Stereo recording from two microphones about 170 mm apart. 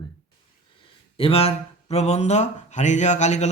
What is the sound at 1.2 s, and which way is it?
Speech, 35° left (ahead or behind).